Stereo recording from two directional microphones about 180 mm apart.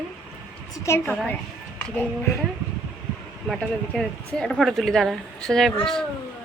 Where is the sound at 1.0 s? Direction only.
5° left (ahead or behind).